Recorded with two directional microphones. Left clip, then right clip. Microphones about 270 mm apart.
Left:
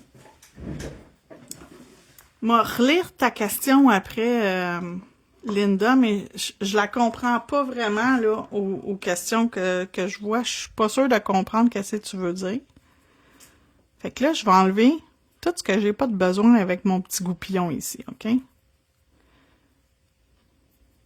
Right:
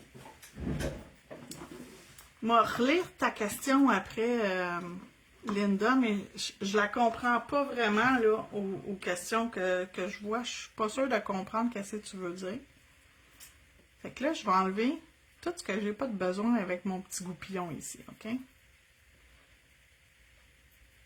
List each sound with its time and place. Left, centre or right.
2.4 s speech: left
14.0 s speech: left